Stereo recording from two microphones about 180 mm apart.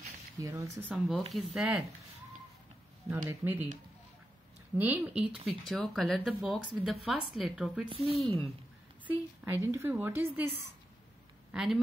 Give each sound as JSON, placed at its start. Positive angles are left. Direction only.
{"t": 0.4, "sound": "a woman's voice", "side_deg": -15}
{"t": 0.8, "sound": "speech", "side_deg": 0}
{"t": 3.3, "sound": "a woman's voice", "side_deg": -10}
{"t": 4.7, "sound": "a woman's voice", "side_deg": -10}
{"t": 7.9, "sound": "a woman's voice", "side_deg": -30}
{"t": 9.0, "sound": "a woman's voice", "side_deg": -10}
{"t": 11.5, "sound": "a woman's voice", "side_deg": -5}